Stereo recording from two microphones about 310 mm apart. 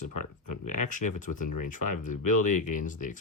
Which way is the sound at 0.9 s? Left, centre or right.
Left.